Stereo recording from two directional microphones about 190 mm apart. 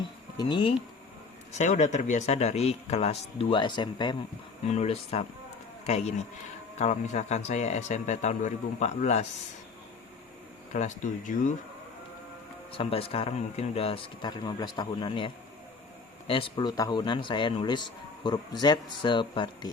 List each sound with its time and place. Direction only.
0.0 s insect: 20° left (ahead or behind)
1.5 s speech: 40° left (ahead or behind)
10.8 s speech: 40° left (ahead or behind)
12.7 s speech: 30° left (ahead or behind)